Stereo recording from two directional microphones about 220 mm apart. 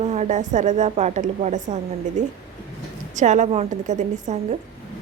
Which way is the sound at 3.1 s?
35° right (ahead or behind).